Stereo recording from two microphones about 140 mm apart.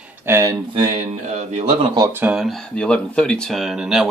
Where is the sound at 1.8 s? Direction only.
30° right (ahead or behind).